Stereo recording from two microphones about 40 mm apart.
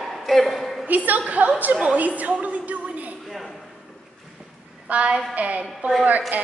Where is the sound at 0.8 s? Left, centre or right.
Right.